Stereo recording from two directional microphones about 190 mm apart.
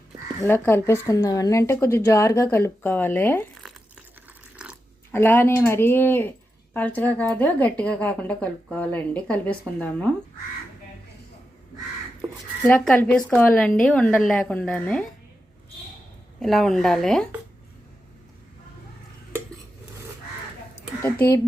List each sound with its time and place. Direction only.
0.4 s a woman's voice: 10° left (ahead or behind)
4.5 s dog: 5° right (ahead or behind)
5.1 s a woman's voice: 10° left (ahead or behind)
12.6 s a woman's voice: 10° left (ahead or behind)
16.4 s speech: centre (ahead or behind)
21.0 s a woman's voice: 10° left (ahead or behind)